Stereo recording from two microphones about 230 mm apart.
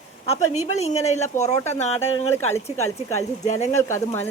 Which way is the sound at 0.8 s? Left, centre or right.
Left.